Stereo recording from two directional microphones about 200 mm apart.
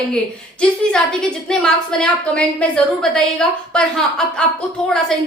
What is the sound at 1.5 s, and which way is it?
A woman's voice, 5° left (ahead or behind).